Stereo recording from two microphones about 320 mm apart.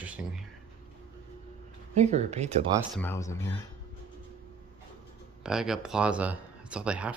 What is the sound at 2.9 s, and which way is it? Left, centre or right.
Speech, centre.